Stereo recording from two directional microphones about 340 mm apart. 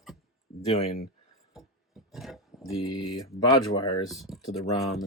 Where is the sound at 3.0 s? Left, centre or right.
Left.